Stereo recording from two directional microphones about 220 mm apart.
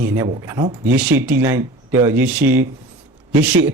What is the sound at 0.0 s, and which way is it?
Speech, 10° right (ahead or behind).